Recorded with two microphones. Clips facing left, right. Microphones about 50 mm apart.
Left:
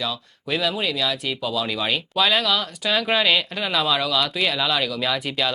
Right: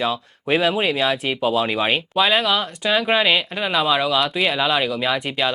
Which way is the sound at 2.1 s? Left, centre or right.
Centre.